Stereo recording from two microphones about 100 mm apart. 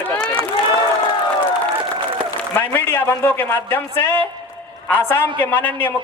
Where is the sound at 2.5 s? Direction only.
20° left (ahead or behind).